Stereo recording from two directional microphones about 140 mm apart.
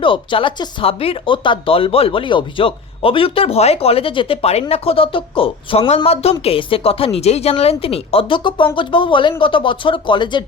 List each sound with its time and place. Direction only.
0.0 s speech: 35° left (ahead or behind)